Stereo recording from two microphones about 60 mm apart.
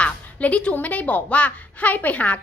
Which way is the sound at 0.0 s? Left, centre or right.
Left.